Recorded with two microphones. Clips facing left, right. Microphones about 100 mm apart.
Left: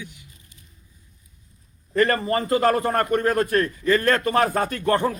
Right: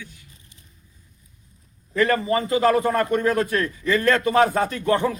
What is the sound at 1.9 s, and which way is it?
A man's voice, 45° left (ahead or behind).